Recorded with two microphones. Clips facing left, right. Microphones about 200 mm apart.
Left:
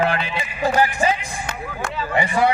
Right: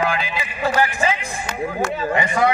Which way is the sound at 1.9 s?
45° right (ahead or behind).